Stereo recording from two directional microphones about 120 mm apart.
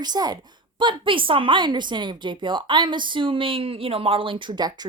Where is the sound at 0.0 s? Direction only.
35° right (ahead or behind).